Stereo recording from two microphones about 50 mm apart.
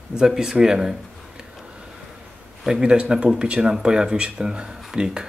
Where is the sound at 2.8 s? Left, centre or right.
Centre.